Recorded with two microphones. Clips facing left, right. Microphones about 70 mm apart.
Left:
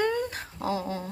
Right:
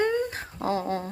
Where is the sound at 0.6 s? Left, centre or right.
Right.